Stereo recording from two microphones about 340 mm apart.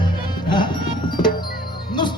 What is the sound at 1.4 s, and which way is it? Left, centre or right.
Music, left.